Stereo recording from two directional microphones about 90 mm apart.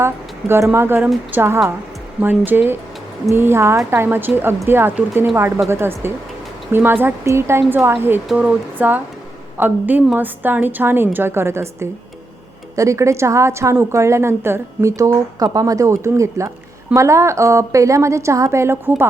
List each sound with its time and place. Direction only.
0.0 s a woman's voice: 30° right (ahead or behind)